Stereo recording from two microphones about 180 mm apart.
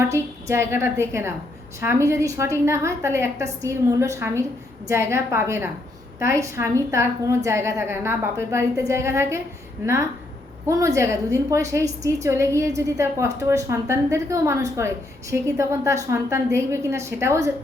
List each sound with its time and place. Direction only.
0.0 s a woman's voice: 15° right (ahead or behind)